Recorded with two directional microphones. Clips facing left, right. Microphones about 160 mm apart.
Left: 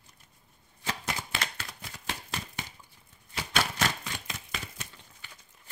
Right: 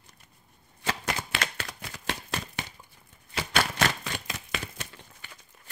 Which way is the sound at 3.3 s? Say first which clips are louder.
Right 3 dB; 75° right (ahead or behind).